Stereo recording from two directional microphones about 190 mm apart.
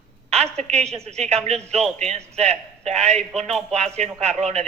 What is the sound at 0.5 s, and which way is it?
A man's voice, 35° right (ahead or behind).